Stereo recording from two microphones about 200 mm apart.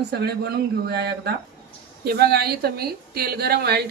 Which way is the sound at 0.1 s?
55° right (ahead or behind).